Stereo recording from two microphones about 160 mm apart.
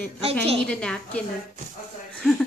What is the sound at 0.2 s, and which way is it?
Speech, 40° right (ahead or behind).